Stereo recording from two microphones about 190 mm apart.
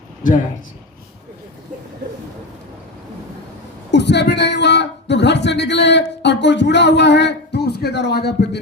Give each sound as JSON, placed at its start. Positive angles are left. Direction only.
{"t": 3.9, "sound": "speech", "side_deg": 65}